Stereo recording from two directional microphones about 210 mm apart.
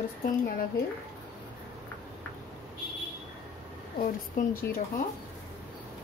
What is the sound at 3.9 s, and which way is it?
Speech, 40° left (ahead or behind).